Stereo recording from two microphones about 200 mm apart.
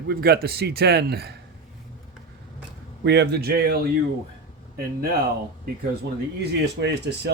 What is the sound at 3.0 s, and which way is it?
Speech, 55° right (ahead or behind).